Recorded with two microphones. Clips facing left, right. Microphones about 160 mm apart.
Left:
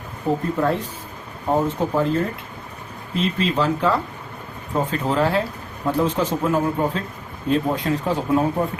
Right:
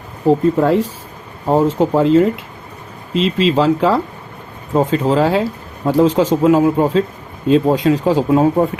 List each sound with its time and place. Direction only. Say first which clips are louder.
0.2 s speech: right 8 dB; 90° right